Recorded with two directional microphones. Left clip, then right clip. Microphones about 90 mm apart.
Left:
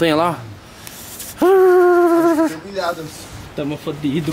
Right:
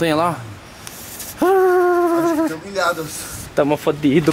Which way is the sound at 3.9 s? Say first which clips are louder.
Right 7 dB; 35° left (ahead or behind).